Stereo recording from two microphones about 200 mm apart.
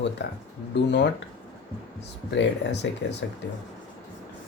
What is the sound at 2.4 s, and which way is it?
Speech, 60° left (ahead or behind).